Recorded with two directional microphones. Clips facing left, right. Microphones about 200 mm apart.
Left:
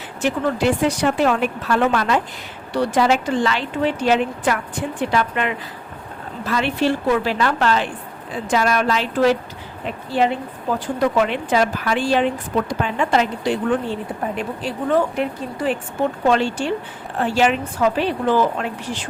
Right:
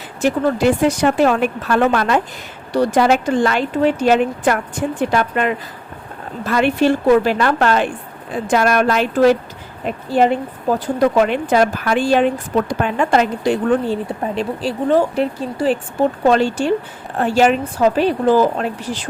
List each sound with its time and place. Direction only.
0.2 s a woman's voice: 40° right (ahead or behind)
14.3 s a woman's voice: 30° right (ahead or behind)